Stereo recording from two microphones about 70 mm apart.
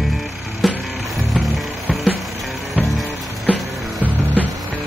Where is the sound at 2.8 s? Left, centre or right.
Centre.